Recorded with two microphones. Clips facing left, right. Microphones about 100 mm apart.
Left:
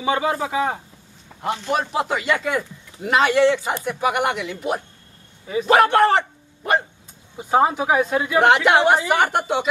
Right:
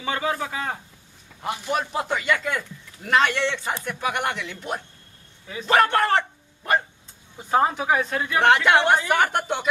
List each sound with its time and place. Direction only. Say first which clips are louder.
0.0 s speech: left 5 dB; 15° left (ahead or behind)
1.7 s speech: left 3 dB; 5° left (ahead or behind)
2.2 s speech: left 3 dB; 20° left (ahead or behind)